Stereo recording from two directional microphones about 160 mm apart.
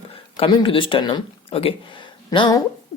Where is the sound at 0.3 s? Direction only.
30° left (ahead or behind).